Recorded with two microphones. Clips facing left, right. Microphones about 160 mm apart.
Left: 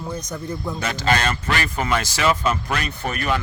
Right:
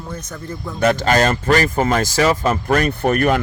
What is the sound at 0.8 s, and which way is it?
Speech, 55° right (ahead or behind).